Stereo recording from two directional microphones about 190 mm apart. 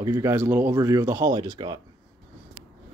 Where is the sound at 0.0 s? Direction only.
15° right (ahead or behind).